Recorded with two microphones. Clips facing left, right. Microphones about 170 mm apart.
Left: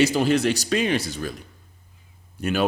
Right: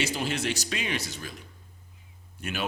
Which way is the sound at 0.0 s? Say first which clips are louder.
Left 10 dB; 40° left (ahead or behind).